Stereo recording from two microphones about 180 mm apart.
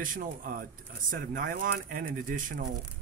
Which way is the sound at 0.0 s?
50° right (ahead or behind).